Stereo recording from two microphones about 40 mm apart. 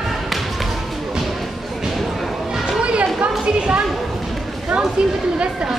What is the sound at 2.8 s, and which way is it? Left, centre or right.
Music, right.